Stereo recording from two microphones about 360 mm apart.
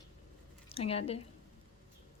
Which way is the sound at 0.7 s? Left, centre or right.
Centre.